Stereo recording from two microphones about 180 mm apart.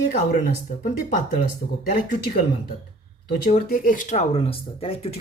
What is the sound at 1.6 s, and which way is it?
Speech, 35° left (ahead or behind).